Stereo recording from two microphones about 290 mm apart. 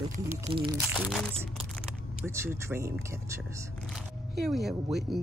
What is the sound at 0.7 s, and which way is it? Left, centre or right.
Speech, centre.